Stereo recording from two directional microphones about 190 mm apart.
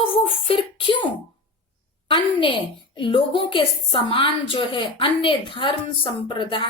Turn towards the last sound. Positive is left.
turn(degrees=25)  # may be behind; listen again after turning